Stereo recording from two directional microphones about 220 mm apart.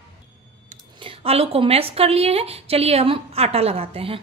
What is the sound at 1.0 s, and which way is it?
A woman's voice, 25° right (ahead or behind).